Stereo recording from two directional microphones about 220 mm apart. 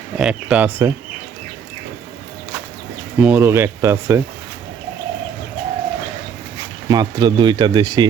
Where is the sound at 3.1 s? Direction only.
5° right (ahead or behind).